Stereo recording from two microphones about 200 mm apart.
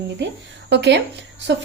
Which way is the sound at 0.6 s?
60° right (ahead or behind).